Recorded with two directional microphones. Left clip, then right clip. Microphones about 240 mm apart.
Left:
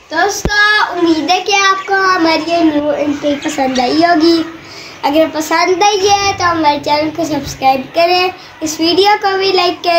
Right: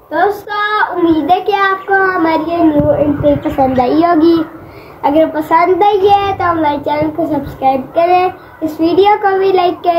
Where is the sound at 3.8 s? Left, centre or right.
Centre.